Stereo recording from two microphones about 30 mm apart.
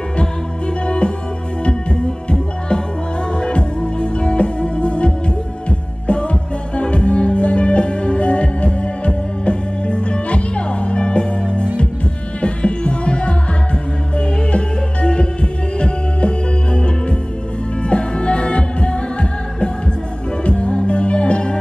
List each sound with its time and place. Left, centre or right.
0.8 s music: left
3.3 s music: left
20.4 s music: left